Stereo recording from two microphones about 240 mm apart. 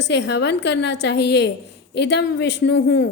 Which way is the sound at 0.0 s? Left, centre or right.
Left.